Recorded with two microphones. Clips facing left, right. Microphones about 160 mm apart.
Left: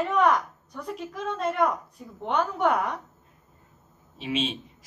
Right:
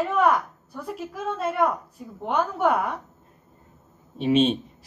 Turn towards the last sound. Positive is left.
turn(degrees=-45)  # may be behind; listen again after turning